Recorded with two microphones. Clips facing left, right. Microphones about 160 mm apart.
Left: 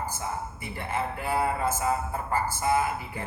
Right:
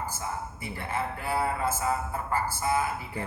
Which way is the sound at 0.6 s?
20° left (ahead or behind).